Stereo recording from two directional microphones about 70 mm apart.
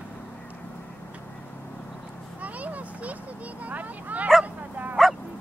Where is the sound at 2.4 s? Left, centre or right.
Right.